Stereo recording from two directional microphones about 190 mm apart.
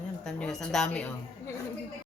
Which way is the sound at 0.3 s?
5° left (ahead or behind).